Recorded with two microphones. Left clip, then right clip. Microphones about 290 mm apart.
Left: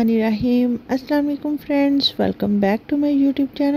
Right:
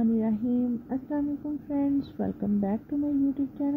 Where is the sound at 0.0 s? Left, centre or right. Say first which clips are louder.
Left 9 dB; left.